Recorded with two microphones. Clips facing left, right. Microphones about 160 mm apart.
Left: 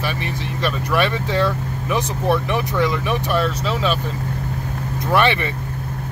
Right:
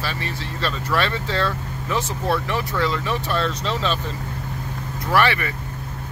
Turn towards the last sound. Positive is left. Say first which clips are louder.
# left 2 dB
turn(degrees=20)  # may be behind; listen again after turning